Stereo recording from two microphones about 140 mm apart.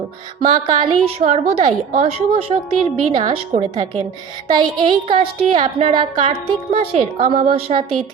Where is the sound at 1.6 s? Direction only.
65° right (ahead or behind).